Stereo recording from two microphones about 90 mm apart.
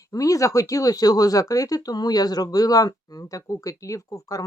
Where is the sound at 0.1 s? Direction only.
40° left (ahead or behind).